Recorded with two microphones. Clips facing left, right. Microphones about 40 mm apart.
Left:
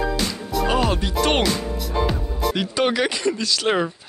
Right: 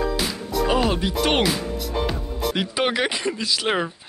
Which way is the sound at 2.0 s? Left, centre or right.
Centre.